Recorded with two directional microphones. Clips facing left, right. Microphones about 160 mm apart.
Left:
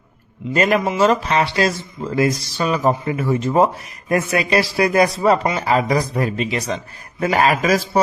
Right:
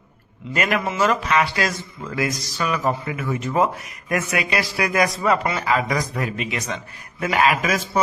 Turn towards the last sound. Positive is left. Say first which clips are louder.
# left 3 dB
turn(degrees=35)  # may be behind; listen again after turning